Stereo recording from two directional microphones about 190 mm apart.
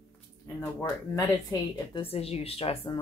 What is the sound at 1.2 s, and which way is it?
A woman's voice, 20° left (ahead or behind).